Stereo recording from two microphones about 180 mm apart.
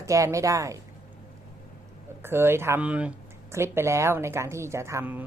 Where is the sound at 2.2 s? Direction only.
15° right (ahead or behind).